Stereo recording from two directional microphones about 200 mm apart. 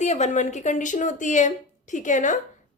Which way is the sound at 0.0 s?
35° left (ahead or behind).